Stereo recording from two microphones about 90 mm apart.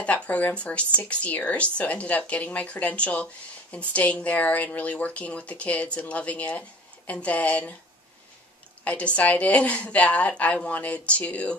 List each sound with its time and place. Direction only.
0.0 s speech: 15° left (ahead or behind)
8.8 s speech: 15° left (ahead or behind)